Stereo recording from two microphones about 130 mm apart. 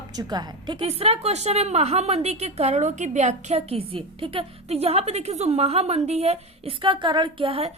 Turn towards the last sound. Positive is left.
turn(degrees=-45)  # may be behind; listen again after turning